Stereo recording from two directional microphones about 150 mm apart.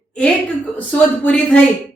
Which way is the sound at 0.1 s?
10° left (ahead or behind).